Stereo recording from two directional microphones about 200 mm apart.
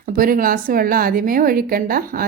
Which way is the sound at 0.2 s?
45° right (ahead or behind).